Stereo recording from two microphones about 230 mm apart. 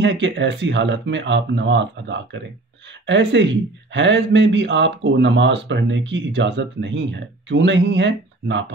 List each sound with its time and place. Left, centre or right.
0.0 s speech: right